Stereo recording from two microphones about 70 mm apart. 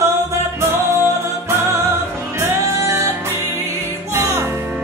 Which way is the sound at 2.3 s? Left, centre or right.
Right.